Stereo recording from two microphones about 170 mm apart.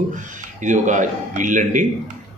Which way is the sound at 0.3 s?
45° right (ahead or behind).